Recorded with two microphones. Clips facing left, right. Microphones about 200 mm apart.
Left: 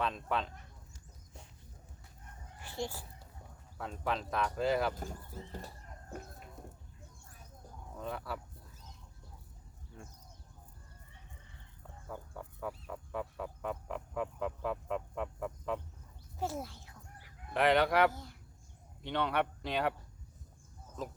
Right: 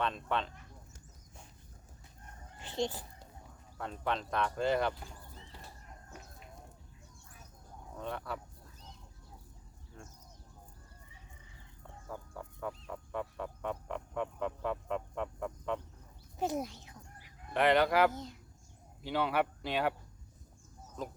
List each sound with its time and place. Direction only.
0.0 s speech: centre (ahead or behind)
2.6 s speech: 20° right (ahead or behind)
3.8 s speech: centre (ahead or behind)
4.9 s speech: 45° left (ahead or behind)
7.9 s speech: centre (ahead or behind)
12.0 s a sound: centre (ahead or behind)
16.4 s a sound: 20° right (ahead or behind)
17.5 s speech: centre (ahead or behind)
18.1 s speech: 20° right (ahead or behind)
19.0 s speech: 5° right (ahead or behind)
21.0 s speech: centre (ahead or behind)